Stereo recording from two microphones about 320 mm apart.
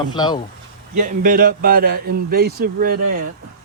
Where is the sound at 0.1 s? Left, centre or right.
Centre.